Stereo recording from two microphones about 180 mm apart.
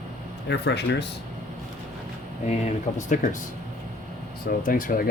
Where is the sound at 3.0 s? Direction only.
45° left (ahead or behind).